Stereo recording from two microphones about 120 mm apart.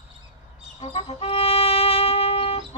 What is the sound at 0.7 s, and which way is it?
Music, 55° left (ahead or behind).